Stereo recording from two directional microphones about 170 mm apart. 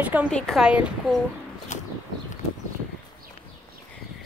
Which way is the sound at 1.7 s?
45° left (ahead or behind).